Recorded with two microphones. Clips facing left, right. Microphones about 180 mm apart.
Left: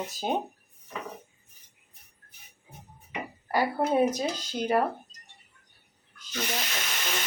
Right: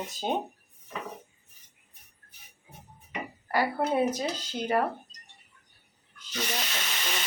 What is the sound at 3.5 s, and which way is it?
Speech, 10° left (ahead or behind).